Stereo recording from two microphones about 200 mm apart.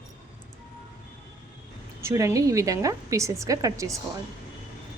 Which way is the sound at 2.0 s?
15° right (ahead or behind).